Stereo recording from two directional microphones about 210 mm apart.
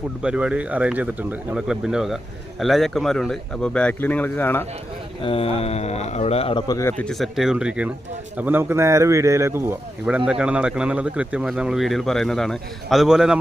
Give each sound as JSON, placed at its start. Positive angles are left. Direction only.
{"t": 0.2, "sound": "speech", "side_deg": -5}
{"t": 5.2, "sound": "speech", "side_deg": 25}
{"t": 7.0, "sound": "speech", "side_deg": 0}